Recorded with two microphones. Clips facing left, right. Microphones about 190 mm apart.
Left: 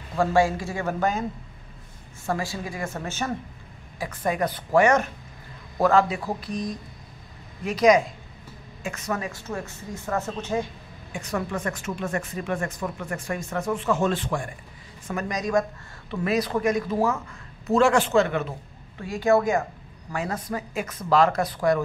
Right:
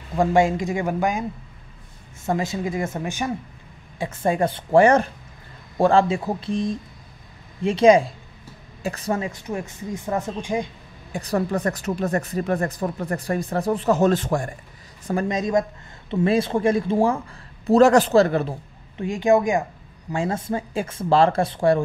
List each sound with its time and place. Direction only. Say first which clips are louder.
0.1 s speech: right 3 dB; 20° right (ahead or behind)
2.2 s speech: right 5 dB; 20° right (ahead or behind)
4.0 s speech: right 4 dB; 25° right (ahead or behind)
11.1 s speech: right 6 dB; 35° right (ahead or behind)
15.0 s speech: right 5 dB; 30° right (ahead or behind)
18.9 s speech: right 3 dB; 20° right (ahead or behind)